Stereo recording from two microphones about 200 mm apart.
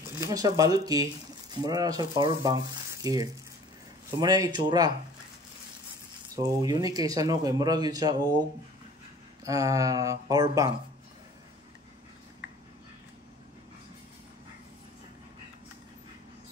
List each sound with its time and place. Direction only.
0.2 s speech: 15° right (ahead or behind)
6.3 s speech: 20° right (ahead or behind)